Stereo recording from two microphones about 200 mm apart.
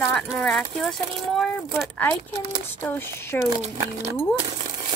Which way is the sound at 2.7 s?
10° left (ahead or behind).